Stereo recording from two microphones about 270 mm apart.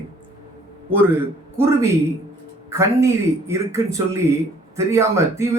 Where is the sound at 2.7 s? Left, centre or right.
Centre.